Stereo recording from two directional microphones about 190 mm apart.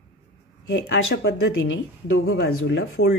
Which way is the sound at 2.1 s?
75° left (ahead or behind).